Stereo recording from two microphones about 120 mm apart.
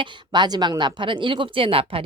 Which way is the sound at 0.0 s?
35° right (ahead or behind).